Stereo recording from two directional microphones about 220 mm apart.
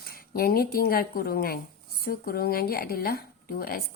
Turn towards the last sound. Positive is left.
turn(degrees=45)  # may be behind; listen again after turning